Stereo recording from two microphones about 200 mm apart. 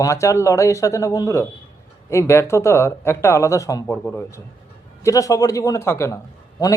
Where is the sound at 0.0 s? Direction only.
15° left (ahead or behind).